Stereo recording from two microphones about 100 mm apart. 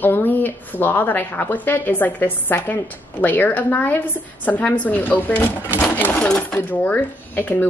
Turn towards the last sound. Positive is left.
turn(degrees=20)  # may be behind; listen again after turning